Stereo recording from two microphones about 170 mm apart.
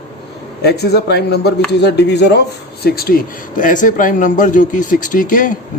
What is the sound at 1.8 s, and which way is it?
Speech, 90° left.